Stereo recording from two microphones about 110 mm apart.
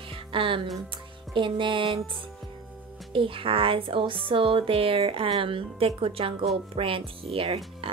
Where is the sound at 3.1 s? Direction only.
55° right (ahead or behind).